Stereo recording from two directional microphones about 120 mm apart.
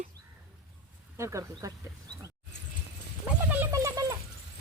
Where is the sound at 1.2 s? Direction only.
25° right (ahead or behind).